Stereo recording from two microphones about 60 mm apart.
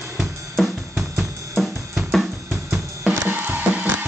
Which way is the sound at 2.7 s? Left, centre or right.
Centre.